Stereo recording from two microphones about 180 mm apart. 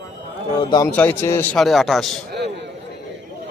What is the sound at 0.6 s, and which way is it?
Speech, 25° left (ahead or behind).